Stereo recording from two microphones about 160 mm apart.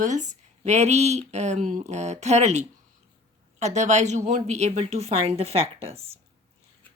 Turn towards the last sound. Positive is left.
turn(degrees=-40)  # may be behind; listen again after turning